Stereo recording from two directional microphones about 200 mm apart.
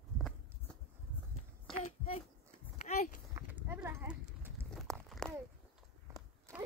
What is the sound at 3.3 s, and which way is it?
Horse, 15° right (ahead or behind).